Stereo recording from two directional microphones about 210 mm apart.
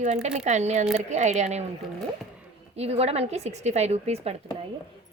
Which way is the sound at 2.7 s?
30° right (ahead or behind).